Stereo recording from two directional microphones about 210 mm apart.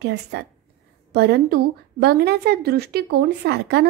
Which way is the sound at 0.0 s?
50° right (ahead or behind).